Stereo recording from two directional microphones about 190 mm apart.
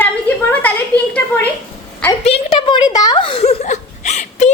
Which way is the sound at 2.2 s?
30° left (ahead or behind).